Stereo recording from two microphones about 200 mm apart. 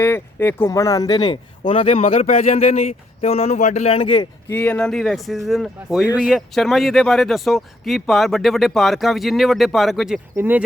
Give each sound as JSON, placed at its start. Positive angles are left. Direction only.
{"t": 0.0, "sound": "speech", "side_deg": 10}
{"t": 4.5, "sound": "speech", "side_deg": 5}